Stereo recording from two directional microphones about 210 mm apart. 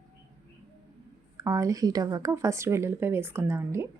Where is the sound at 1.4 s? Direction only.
15° right (ahead or behind).